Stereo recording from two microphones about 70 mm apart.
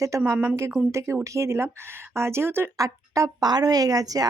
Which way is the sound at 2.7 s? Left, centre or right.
Right.